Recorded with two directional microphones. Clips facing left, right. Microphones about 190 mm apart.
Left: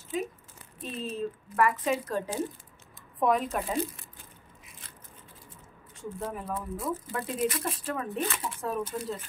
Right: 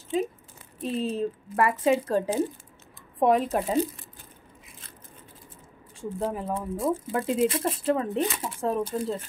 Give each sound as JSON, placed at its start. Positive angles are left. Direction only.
{"t": 0.8, "sound": "speech", "side_deg": -30}
{"t": 5.9, "sound": "speech", "side_deg": -30}